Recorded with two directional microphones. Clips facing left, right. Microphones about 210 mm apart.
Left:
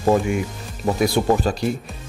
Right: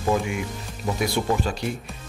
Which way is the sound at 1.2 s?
45° left (ahead or behind).